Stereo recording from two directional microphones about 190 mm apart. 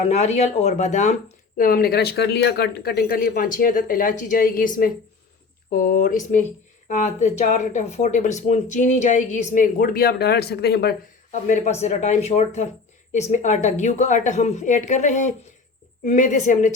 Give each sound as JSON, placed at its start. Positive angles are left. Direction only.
{"t": 0.1, "sound": "a woman's voice", "side_deg": 35}
{"t": 1.5, "sound": "a woman's voice", "side_deg": 50}
{"t": 11.3, "sound": "a woman's voice", "side_deg": 40}